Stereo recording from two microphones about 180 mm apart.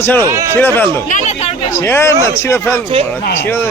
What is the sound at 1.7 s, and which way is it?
Speech, 15° left (ahead or behind).